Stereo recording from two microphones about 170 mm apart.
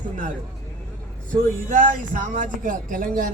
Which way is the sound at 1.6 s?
50° right (ahead or behind).